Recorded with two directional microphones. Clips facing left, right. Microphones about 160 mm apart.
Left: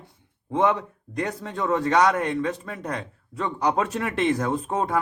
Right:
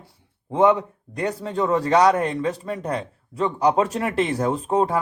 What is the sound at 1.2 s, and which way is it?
Speech, 30° right (ahead or behind).